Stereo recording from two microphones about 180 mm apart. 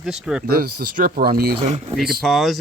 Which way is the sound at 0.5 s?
55° right (ahead or behind).